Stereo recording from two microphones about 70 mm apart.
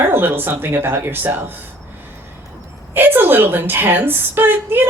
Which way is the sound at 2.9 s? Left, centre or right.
Right.